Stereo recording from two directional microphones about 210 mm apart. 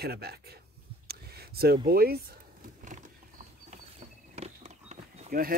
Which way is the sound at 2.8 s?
35° right (ahead or behind).